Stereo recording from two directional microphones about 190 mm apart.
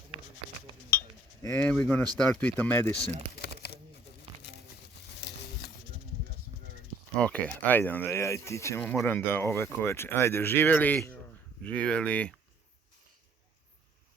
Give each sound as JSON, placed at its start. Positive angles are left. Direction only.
{"t": 0.9, "sound": "cutlery", "side_deg": 10}
{"t": 2.3, "sound": "speech", "side_deg": 10}
{"t": 3.3, "sound": "a sound", "side_deg": 60}
{"t": 7.2, "sound": "speech", "side_deg": 5}